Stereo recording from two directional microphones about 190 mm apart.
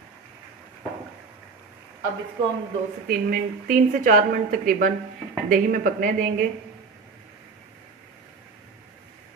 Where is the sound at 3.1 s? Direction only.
50° right (ahead or behind).